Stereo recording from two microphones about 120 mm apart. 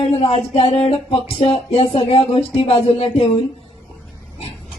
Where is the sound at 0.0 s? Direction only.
55° left (ahead or behind).